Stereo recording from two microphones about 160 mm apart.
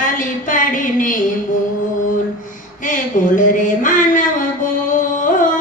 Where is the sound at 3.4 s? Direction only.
55° left (ahead or behind).